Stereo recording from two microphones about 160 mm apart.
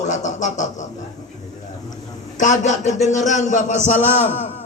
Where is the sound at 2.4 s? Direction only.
50° left (ahead or behind).